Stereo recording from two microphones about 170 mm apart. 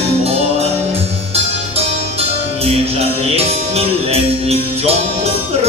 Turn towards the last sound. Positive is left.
turn(degrees=-35)  # may be behind; listen again after turning